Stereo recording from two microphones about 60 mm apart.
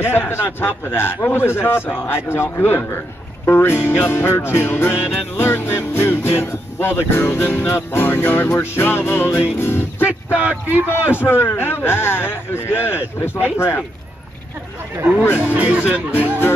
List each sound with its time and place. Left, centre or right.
0.0 s a man's voice: left
10.0 s speech: right
11.1 s a man's voice: left
15.5 s speech: right